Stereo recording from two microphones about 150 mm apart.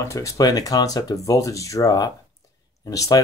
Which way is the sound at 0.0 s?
20° left (ahead or behind).